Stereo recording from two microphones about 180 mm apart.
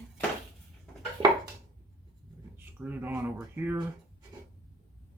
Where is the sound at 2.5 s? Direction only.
10° right (ahead or behind).